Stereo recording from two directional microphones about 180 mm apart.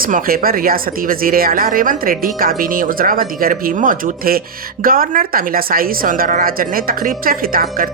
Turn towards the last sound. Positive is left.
turn(degrees=-55)  # may be behind; listen again after turning